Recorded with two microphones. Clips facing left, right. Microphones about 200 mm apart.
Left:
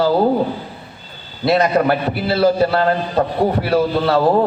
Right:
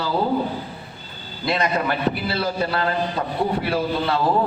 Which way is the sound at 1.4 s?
45° left (ahead or behind).